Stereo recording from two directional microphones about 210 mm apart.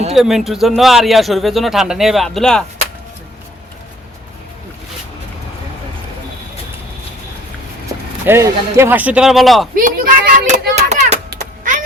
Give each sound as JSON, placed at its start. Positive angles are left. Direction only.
{"t": 0.1, "sound": "speech", "side_deg": 0}
{"t": 8.2, "sound": "speech", "side_deg": -10}
{"t": 9.7, "sound": "a child's voice", "side_deg": -40}
{"t": 11.3, "sound": "a sound", "side_deg": -40}